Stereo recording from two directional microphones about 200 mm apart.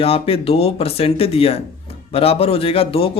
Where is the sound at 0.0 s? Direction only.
30° left (ahead or behind).